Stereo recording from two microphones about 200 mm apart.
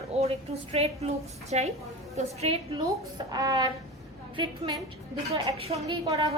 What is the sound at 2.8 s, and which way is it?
A woman's voice, 15° right (ahead or behind).